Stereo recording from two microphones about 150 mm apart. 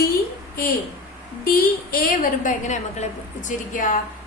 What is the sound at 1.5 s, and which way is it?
A woman's voice, 80° left.